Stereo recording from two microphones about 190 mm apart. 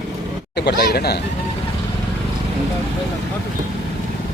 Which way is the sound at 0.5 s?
60° left (ahead or behind).